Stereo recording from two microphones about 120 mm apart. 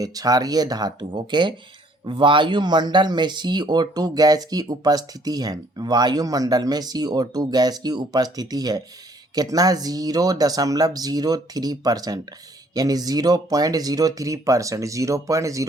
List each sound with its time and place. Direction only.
0.0 s speech: 30° right (ahead or behind)